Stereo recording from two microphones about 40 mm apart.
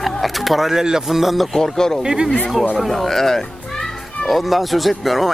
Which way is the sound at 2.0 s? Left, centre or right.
Centre.